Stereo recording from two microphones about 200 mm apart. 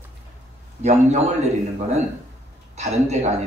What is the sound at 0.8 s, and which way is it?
Speech, 35° right (ahead or behind).